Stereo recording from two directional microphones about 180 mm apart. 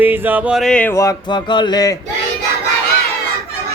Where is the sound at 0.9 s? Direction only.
20° left (ahead or behind).